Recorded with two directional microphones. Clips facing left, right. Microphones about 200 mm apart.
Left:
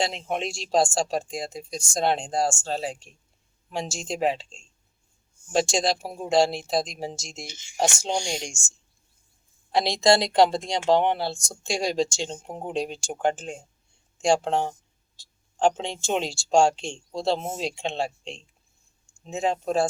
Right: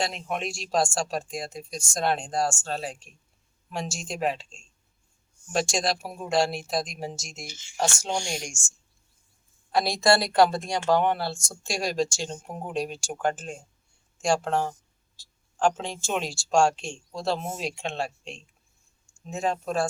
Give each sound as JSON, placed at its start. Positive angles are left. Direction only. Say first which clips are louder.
{"t": 0.0, "sound": "speech", "louder": "left 2 dB", "side_deg": 25}
{"t": 5.7, "sound": "speech", "louder": "left 3 dB", "side_deg": 25}
{"t": 7.4, "sound": "speech", "louder": "left 3 dB", "side_deg": 20}
{"t": 9.7, "sound": "speech", "louder": "left 2 dB", "side_deg": 20}